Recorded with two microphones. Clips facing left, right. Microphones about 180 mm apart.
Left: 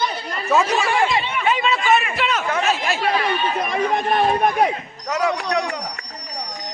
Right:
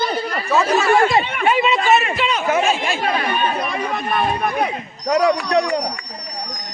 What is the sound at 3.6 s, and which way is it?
Chatter, 15° left (ahead or behind).